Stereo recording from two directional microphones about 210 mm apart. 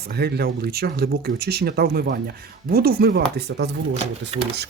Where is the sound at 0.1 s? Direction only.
50° right (ahead or behind).